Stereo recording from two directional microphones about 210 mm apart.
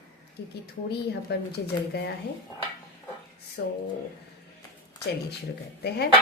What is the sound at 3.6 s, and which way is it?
Speech, 50° left (ahead or behind).